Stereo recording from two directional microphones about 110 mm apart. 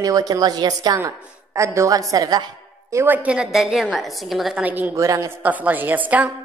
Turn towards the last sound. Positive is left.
turn(degrees=-15)  # may be behind; listen again after turning